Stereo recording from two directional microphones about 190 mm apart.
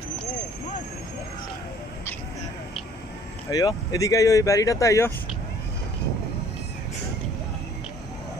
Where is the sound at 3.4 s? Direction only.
20° left (ahead or behind).